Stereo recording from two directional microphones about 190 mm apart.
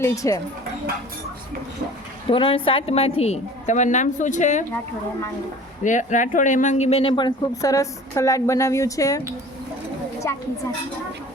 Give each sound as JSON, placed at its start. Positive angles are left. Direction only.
{"t": 0.0, "sound": "speech", "side_deg": 15}
{"t": 2.2, "sound": "a woman's voice", "side_deg": 30}
{"t": 5.8, "sound": "speech", "side_deg": 40}
{"t": 10.3, "sound": "speech", "side_deg": 15}